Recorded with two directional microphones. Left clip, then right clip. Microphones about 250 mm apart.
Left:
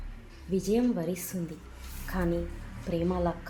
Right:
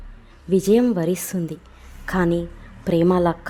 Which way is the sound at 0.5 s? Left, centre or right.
Right.